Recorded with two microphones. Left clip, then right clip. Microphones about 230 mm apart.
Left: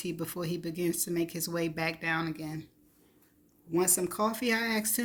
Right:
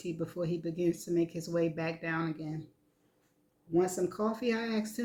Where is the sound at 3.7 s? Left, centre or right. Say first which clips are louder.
Even; left.